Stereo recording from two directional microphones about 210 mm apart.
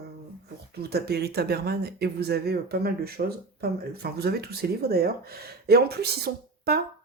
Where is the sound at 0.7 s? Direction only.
50° right (ahead or behind).